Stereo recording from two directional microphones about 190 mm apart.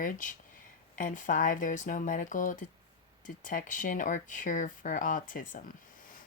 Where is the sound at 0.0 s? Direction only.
45° left (ahead or behind).